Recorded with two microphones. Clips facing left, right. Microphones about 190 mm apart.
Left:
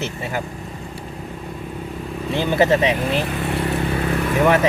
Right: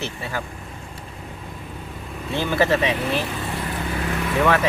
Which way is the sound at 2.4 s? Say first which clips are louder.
Left 3 dB; 20° left (ahead or behind).